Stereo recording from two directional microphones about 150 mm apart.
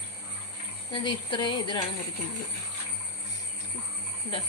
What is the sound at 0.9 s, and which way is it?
Speech, 30° left (ahead or behind).